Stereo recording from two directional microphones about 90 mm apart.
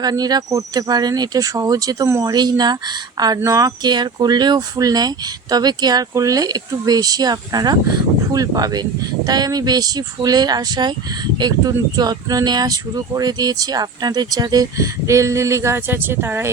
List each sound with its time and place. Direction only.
0.0 s speech: 45° right (ahead or behind)
3.4 s speech: 40° right (ahead or behind)